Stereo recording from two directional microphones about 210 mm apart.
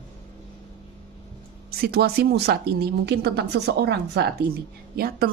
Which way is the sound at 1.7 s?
50° right (ahead or behind).